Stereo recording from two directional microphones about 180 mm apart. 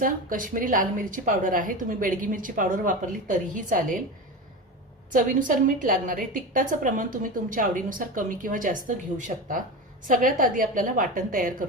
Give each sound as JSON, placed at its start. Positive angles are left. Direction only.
{"t": 0.0, "sound": "a woman's voice", "side_deg": -50}
{"t": 5.1, "sound": "a woman's voice", "side_deg": -50}
{"t": 9.3, "sound": "speech", "side_deg": -35}
{"t": 10.1, "sound": "a woman's voice", "side_deg": -45}